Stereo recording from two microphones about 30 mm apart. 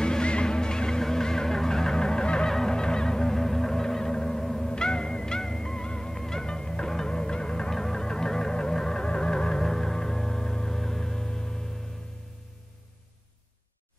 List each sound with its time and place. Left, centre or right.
0.0 s music: left
2.5 s honk: centre
5.4 s music: centre